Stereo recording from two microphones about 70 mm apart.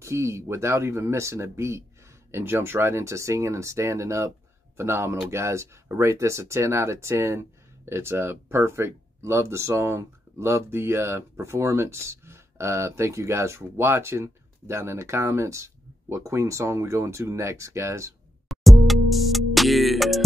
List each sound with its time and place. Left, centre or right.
0.0 s speech: right
18.5 s music: centre